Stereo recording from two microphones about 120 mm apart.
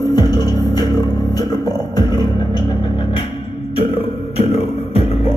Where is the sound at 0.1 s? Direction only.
35° left (ahead or behind); by 5.3 s 55° left (ahead or behind).